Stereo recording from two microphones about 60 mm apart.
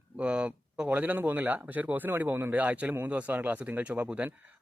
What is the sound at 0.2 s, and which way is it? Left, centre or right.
A man's voice, centre.